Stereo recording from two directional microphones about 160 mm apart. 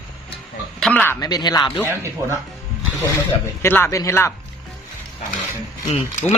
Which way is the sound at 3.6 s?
15° left (ahead or behind).